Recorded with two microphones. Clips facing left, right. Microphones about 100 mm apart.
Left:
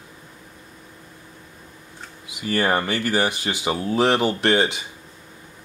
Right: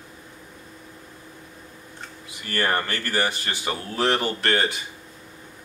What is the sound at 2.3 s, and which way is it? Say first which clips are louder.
Speech: left 4 dB; 15° left (ahead or behind).